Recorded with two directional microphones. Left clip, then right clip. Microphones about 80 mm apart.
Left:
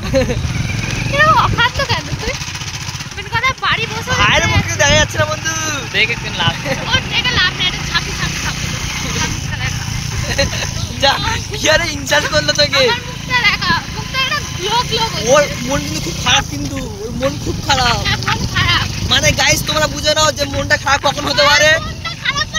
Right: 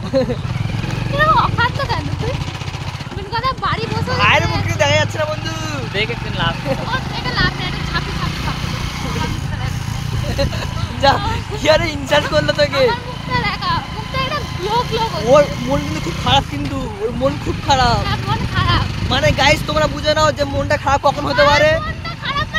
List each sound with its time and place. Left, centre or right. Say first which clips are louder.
0.1 s speech: left 2 dB; centre
1.1 s vehicle: left 3 dB; left
3.3 s speech: left 4 dB; left
4.2 s speech: left 1 dB; centre
6.9 s vehicle: left 6 dB; centre
11.0 s speech: left 1 dB; centre
12.8 s vehicle: left 1 dB; left
15.2 s speech: right 1 dB; centre
18.0 s vehicle: left 4 dB; left
19.0 s speech: even; centre
20.6 s speech: left 2 dB; right